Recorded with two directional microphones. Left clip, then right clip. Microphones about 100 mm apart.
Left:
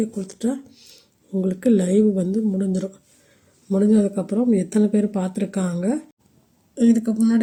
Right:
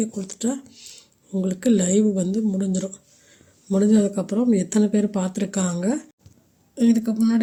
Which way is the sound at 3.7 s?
Centre (ahead or behind).